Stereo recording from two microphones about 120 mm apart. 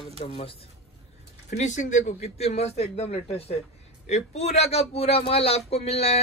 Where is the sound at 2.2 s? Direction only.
60° left (ahead or behind).